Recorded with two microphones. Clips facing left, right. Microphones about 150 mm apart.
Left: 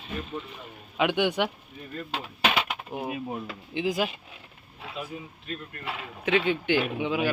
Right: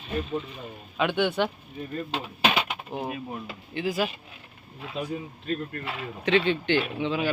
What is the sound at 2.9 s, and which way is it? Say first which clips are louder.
Speech: left 1 dB; 10° left (ahead or behind).